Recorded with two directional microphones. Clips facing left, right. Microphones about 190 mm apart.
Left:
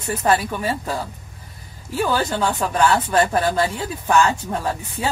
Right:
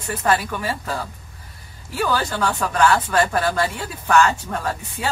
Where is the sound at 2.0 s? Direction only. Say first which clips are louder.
Left 1 dB; 20° left (ahead or behind).